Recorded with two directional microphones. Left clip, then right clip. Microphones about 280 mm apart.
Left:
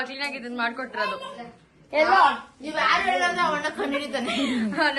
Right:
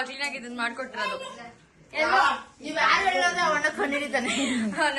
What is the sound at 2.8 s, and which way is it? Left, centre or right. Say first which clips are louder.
Speech: even; left.